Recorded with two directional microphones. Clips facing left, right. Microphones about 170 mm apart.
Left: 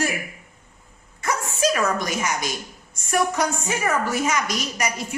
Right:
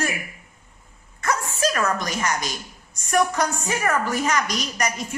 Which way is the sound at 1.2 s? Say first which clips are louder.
Left 1 dB; 10° left (ahead or behind).